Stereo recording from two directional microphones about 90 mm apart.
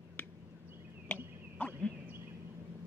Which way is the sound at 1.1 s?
20° left (ahead or behind).